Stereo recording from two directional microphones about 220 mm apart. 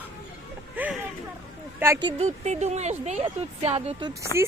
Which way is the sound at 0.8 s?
10° right (ahead or behind).